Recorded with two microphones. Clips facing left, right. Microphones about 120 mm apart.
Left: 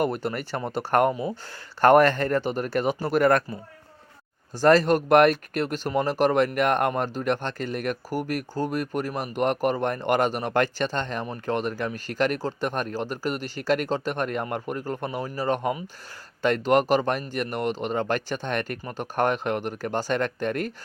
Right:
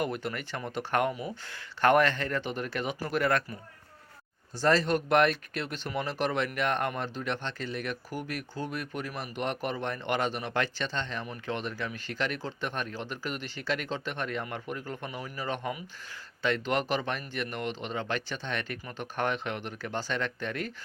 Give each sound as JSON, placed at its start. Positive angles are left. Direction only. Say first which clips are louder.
{"t": 0.0, "sound": "speech", "louder": "left 6 dB", "side_deg": 40}
{"t": 4.6, "sound": "speech", "louder": "left 7 dB", "side_deg": 50}